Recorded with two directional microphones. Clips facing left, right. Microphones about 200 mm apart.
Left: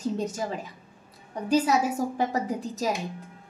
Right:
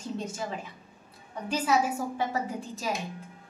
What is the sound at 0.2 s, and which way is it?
Speech, 40° left (ahead or behind).